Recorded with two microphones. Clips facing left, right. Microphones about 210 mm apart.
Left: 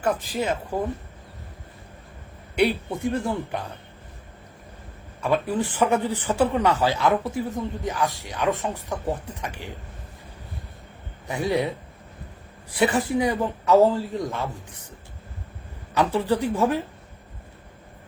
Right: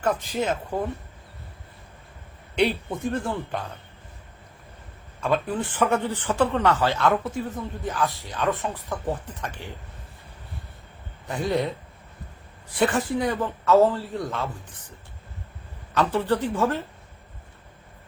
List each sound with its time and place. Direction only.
0.0 s speech: 5° left (ahead or behind)
2.6 s a man's voice: 10° left (ahead or behind)
5.2 s a man's voice: 10° left (ahead or behind)
11.3 s a man's voice: 10° left (ahead or behind)
12.8 s a man's voice: 10° left (ahead or behind)
16.0 s a man's voice: 10° left (ahead or behind)